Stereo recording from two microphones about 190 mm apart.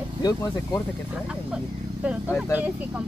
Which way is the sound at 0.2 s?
20° left (ahead or behind).